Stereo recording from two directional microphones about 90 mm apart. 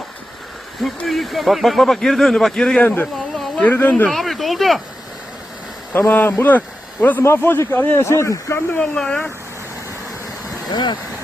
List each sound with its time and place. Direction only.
1.0 s speech: centre (ahead or behind)
2.8 s speech: 20° left (ahead or behind)
3.3 s a sound: 5° left (ahead or behind)
3.7 s speech: 20° left (ahead or behind)
4.1 s speech: centre (ahead or behind)
5.9 s speech: 25° left (ahead or behind)
8.8 s speech: 10° left (ahead or behind)
10.7 s speech: 55° left (ahead or behind)